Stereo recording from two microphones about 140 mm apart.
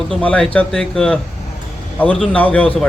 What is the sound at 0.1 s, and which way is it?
Speech, 10° left (ahead or behind).